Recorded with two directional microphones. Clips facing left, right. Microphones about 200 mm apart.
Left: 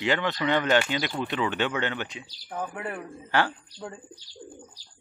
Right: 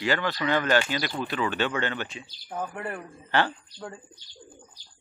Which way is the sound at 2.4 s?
5° right (ahead or behind).